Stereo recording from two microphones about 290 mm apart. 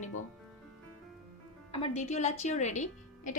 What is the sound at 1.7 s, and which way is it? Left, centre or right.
Speech, left.